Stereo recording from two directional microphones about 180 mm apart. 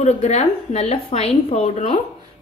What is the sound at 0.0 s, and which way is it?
A woman's voice, 40° left (ahead or behind).